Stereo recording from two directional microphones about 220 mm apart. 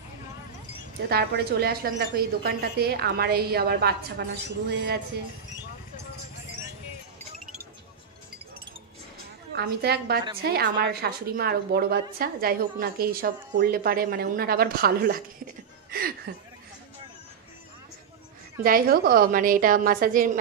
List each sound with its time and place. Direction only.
1.0 s a woman's voice: 45° right (ahead or behind)
9.6 s a woman's voice: 45° right (ahead or behind)
18.6 s a woman's voice: 40° right (ahead or behind)